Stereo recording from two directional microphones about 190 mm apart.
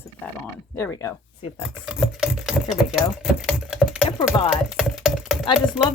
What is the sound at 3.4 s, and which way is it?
Typing, centre (ahead or behind).